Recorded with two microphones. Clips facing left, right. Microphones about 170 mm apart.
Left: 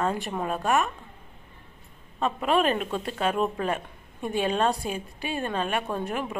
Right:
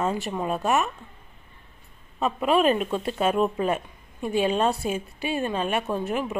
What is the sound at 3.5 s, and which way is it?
Speech, 20° right (ahead or behind).